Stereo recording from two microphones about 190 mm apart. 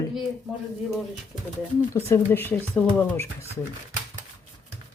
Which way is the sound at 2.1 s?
10° left (ahead or behind).